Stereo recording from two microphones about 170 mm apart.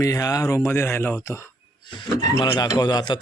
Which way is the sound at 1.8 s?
30° left (ahead or behind).